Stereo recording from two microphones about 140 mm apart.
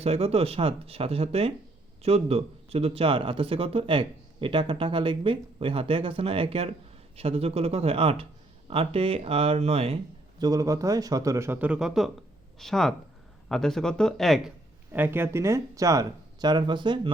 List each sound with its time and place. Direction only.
0.0 s a man's voice: 45° right (ahead or behind)
10.4 s speech: 25° right (ahead or behind); by 14.5 s centre (ahead or behind)
14.9 s speech: 15° right (ahead or behind); by 17.1 s 35° right (ahead or behind)